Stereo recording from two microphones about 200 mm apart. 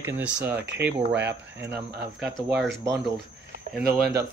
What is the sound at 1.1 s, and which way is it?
Speech, 60° right (ahead or behind).